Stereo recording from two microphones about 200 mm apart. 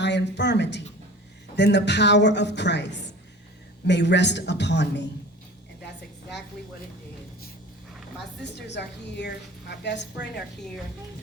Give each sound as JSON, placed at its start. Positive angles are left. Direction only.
{"t": 0.0, "sound": "a woman's voice", "side_deg": 60}
{"t": 8.4, "sound": "a woman's voice", "side_deg": 60}